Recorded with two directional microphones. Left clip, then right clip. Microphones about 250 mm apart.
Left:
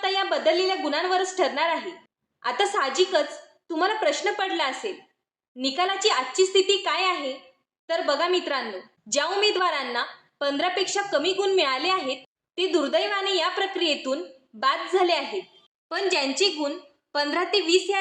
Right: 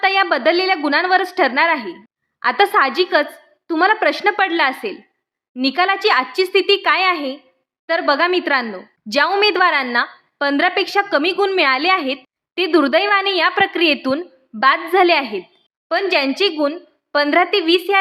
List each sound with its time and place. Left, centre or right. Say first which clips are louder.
0.0 s a woman's voice: right 8 dB; right